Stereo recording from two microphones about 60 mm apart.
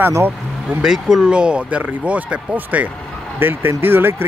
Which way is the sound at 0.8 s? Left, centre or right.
Centre.